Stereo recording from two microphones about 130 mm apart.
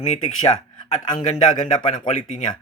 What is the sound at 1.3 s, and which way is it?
Speech, 30° left (ahead or behind).